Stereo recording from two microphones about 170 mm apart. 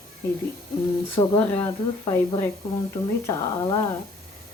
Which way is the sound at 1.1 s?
15° left (ahead or behind).